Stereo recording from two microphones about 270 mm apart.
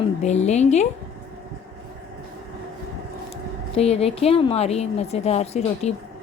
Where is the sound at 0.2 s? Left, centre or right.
Left.